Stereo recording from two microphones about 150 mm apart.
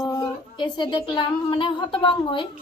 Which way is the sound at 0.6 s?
30° left (ahead or behind).